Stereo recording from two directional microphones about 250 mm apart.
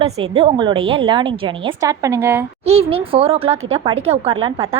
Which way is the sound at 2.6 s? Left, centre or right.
Right.